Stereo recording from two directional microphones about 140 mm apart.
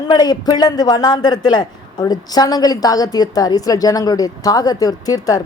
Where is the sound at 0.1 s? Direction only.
30° left (ahead or behind).